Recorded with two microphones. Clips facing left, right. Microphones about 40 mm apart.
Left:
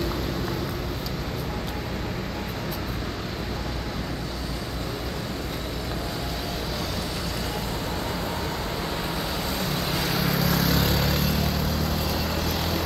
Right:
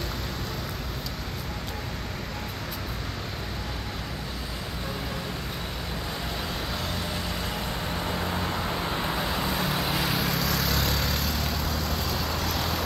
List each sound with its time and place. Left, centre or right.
8.1 s vehicle: centre
10.3 s vehicle: centre